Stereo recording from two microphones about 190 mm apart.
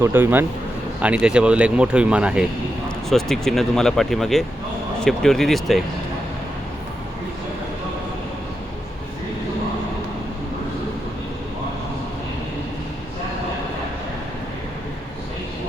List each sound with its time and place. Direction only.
0.0 s speech: 10° right (ahead or behind)